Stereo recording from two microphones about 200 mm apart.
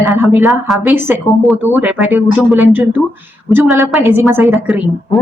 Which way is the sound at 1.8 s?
5° right (ahead or behind).